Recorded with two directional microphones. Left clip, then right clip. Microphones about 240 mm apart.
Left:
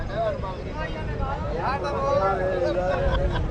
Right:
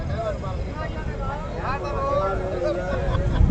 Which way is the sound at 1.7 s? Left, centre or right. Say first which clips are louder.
Even; left.